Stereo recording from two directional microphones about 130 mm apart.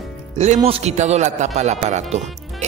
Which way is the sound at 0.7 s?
50° right (ahead or behind).